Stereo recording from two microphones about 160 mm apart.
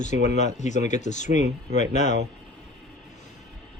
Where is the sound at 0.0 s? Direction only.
45° left (ahead or behind).